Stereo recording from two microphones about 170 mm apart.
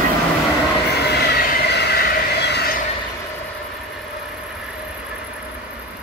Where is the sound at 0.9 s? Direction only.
75° left (ahead or behind).